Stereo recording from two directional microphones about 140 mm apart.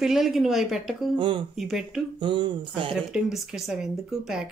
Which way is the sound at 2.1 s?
35° right (ahead or behind).